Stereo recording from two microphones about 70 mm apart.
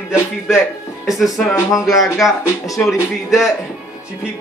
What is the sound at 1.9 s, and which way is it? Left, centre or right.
Speech, centre.